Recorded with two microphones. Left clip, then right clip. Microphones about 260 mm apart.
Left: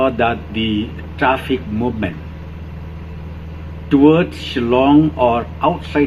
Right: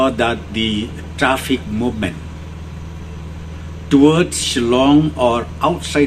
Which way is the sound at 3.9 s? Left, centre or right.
Right.